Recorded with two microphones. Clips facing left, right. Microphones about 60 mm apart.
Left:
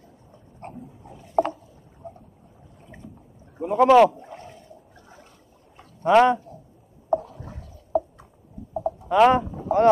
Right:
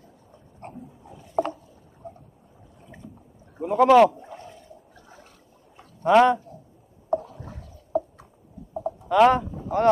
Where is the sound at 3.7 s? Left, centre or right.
Left.